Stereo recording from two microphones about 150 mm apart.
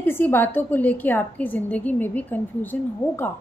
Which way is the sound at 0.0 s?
15° left (ahead or behind).